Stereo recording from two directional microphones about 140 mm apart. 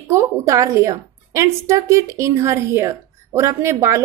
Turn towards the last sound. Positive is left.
turn(degrees=-20)  # may be behind; listen again after turning